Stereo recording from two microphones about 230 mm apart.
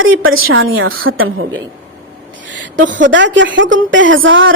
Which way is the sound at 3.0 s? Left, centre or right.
Right.